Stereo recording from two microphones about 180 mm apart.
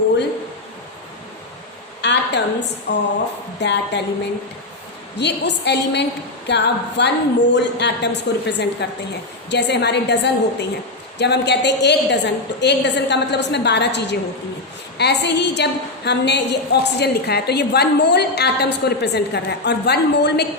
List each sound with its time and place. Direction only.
2.0 s a sound: 75° left (ahead or behind)
2.9 s a woman's voice: 70° left (ahead or behind)
5.1 s a woman's voice: 70° left (ahead or behind)